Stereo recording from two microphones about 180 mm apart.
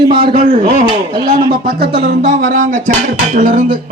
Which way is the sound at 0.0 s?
30° right (ahead or behind).